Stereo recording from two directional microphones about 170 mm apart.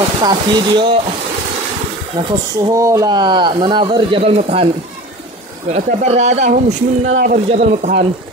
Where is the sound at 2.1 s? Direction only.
20° right (ahead or behind); by 4.6 s 40° right (ahead or behind).